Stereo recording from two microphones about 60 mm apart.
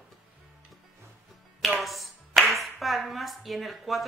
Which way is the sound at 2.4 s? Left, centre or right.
Centre.